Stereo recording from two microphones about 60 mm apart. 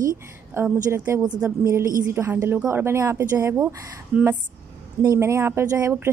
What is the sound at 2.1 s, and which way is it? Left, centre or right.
Speech, right.